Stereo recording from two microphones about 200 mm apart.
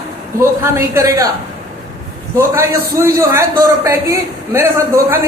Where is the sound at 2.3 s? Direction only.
15° right (ahead or behind).